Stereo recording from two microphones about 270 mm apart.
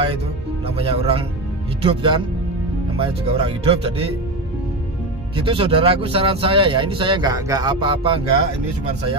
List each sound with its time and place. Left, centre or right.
0.7 s speech: right
5.3 s speech: centre